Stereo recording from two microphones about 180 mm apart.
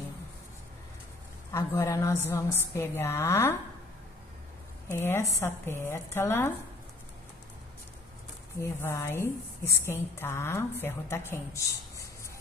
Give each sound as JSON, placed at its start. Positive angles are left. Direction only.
{"t": 1.5, "sound": "a woman's voice", "side_deg": 15}
{"t": 4.9, "sound": "a woman's voice", "side_deg": 15}
{"t": 8.5, "sound": "a woman's voice", "side_deg": 15}